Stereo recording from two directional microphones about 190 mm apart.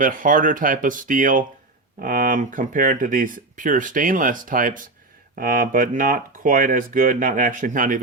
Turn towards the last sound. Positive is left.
turn(degrees=-45)  # may be behind; listen again after turning